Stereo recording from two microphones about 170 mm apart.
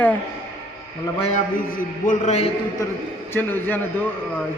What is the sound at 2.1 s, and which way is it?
Speech, 40° left (ahead or behind).